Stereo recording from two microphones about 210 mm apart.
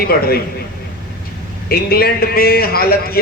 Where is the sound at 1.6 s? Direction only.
45° left (ahead or behind).